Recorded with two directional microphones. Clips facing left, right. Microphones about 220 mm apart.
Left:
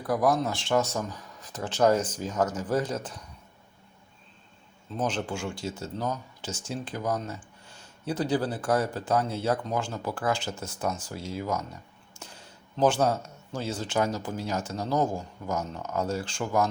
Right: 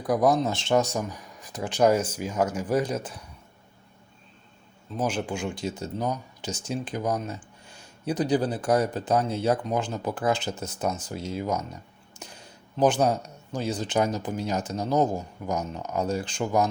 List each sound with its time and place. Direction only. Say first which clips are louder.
0.0 s speech: right 3 dB; 20° right (ahead or behind)
4.9 s speech: right 2 dB; 10° right (ahead or behind)